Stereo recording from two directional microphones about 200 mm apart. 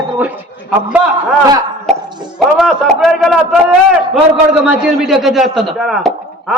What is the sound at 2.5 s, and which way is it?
Speech, centre (ahead or behind).